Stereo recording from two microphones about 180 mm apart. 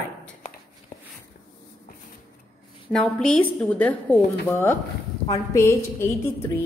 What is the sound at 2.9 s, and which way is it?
A woman's voice, 5° left (ahead or behind).